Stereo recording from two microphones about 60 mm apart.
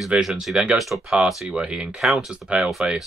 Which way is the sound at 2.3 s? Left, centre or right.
Centre.